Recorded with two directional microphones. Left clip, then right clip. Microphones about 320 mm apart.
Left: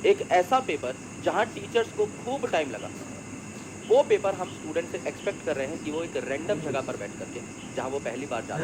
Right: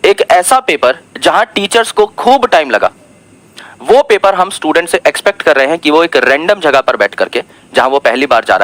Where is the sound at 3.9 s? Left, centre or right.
Right.